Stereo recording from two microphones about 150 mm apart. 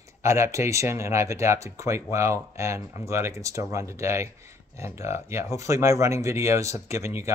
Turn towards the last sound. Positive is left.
turn(degrees=-20)  # may be behind; listen again after turning